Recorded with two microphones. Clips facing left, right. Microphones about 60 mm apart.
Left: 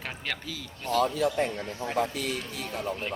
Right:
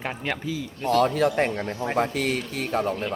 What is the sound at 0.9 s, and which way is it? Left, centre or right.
Speech, right.